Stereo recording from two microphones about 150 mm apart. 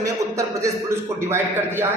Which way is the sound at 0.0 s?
20° right (ahead or behind).